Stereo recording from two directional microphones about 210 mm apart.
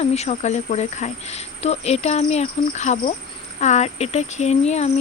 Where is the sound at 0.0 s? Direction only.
30° left (ahead or behind).